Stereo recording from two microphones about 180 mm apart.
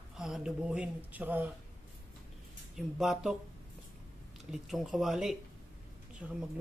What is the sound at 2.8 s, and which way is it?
Speech, centre (ahead or behind).